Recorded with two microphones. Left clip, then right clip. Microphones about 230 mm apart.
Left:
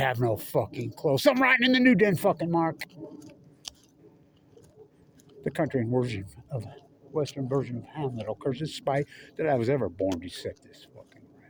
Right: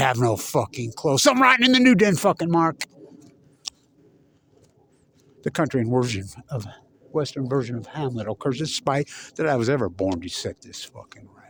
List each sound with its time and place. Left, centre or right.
0.0 s speech: right
3.6 s a sound: centre
5.4 s a man's voice: right